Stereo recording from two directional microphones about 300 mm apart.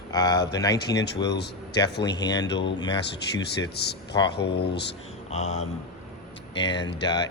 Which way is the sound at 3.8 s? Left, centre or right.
Left.